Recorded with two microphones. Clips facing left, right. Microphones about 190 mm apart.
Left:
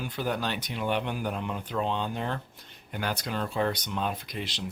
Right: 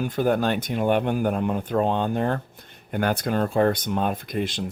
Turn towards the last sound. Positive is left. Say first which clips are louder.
# right 9 dB
turn(degrees=-50)  # may be behind; listen again after turning